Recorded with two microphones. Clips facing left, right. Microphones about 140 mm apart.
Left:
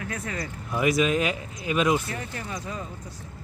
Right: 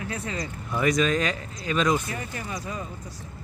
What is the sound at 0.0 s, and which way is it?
Speech, 25° right (ahead or behind).